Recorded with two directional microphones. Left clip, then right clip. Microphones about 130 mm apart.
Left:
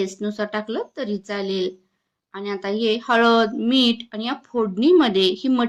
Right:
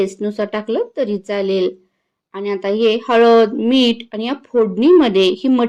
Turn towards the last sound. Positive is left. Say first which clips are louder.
# right 5 dB
turn(degrees=-20)  # may be behind; listen again after turning